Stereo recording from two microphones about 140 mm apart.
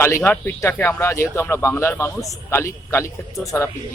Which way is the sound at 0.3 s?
15° left (ahead or behind).